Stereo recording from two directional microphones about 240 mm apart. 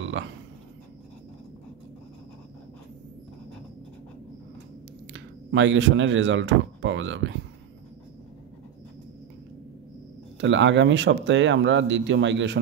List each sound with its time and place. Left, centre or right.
0.2 s speech: right
5.1 s speech: right
10.4 s speech: right